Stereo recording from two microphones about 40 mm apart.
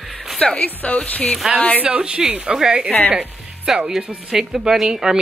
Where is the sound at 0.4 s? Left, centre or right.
Left.